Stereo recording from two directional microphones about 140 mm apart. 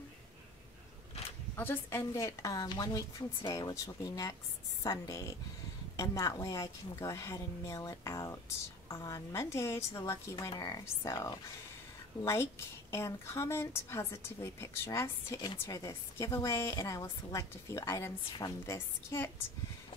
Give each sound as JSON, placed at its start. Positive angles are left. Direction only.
{"t": 1.6, "sound": "a woman's voice", "side_deg": 15}
{"t": 12.9, "sound": "a woman's voice", "side_deg": 20}